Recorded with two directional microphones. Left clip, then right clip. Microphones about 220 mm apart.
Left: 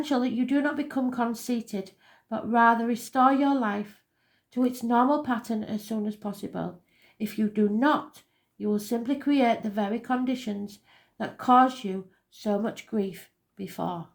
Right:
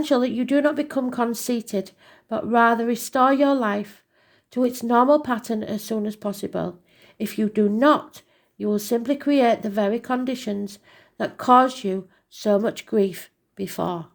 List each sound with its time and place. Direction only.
0.0 s speech: 40° right (ahead or behind)